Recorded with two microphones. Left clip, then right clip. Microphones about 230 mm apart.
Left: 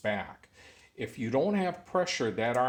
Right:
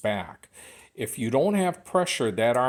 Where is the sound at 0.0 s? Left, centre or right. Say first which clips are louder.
Right 4 dB; right.